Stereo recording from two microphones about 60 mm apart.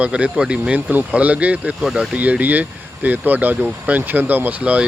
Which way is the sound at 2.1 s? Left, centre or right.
Right.